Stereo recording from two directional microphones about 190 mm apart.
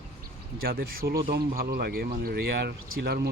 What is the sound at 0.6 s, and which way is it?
Speech, 50° right (ahead or behind).